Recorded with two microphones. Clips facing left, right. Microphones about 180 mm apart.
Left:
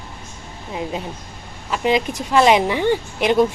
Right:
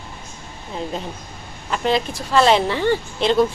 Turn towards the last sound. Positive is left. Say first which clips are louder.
# left 1 dB
turn(degrees=15)  # may be behind; listen again after turning